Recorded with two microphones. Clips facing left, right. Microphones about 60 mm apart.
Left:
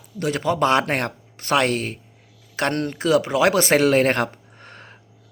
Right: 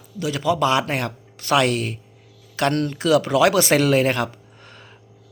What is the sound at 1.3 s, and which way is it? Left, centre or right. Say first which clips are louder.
Speech: right 1 dB; left.